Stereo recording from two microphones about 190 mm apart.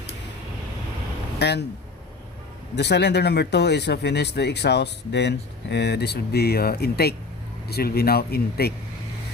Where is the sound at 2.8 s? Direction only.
60° left (ahead or behind).